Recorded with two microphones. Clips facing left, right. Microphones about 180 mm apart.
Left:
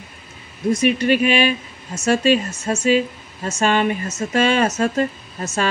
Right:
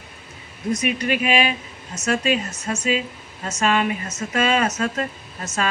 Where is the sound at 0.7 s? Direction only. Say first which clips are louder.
Left 6 dB; 30° left (ahead or behind).